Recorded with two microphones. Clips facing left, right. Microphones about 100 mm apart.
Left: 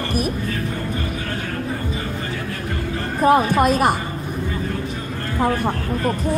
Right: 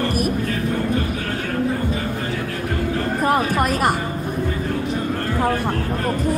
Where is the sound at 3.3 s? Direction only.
20° left (ahead or behind).